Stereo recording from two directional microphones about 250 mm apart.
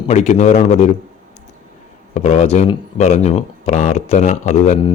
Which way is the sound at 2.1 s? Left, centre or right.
Left.